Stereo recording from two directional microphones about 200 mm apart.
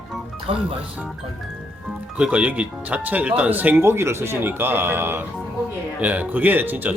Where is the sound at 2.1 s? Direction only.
5° right (ahead or behind).